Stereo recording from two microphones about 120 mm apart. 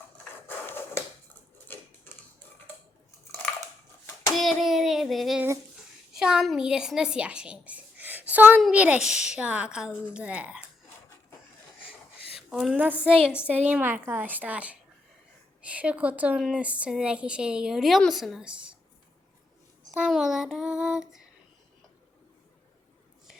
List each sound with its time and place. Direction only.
0.4 s dog: 20° left (ahead or behind)
1.7 s a sound: 15° left (ahead or behind)
4.4 s hands: centre (ahead or behind)
6.1 s a woman's voice: 5° right (ahead or behind)
12.5 s a woman's voice: 5° right (ahead or behind)
20.1 s child singing: centre (ahead or behind)